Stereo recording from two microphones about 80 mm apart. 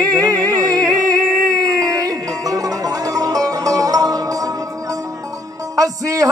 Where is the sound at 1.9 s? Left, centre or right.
Right.